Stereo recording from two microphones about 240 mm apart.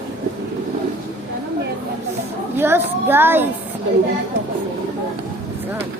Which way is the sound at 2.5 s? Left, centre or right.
Centre.